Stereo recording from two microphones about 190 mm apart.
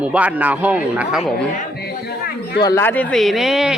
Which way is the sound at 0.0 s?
5° right (ahead or behind).